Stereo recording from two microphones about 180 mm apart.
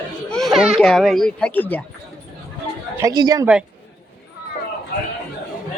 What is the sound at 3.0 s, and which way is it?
Speech, 20° right (ahead or behind).